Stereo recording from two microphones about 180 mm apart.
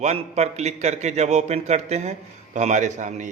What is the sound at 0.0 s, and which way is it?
A man's voice, 40° right (ahead or behind).